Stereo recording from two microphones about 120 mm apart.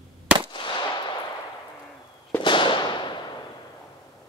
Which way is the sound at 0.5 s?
40° left (ahead or behind).